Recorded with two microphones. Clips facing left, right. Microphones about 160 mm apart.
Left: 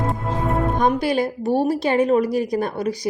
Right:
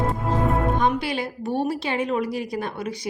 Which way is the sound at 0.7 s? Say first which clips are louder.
Left 4 dB; 45° left (ahead or behind).